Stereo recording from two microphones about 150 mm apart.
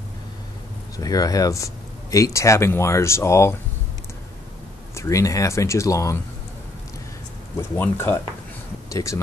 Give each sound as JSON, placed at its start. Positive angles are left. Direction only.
{"t": 0.9, "sound": "speech", "side_deg": 25}
{"t": 4.9, "sound": "speech", "side_deg": 20}
{"t": 7.7, "sound": "speech", "side_deg": 15}